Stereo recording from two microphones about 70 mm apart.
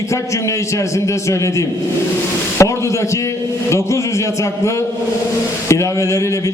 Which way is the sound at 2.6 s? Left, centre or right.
Left.